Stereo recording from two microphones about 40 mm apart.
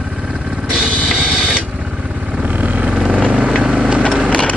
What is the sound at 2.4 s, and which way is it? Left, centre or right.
Vehicle, right.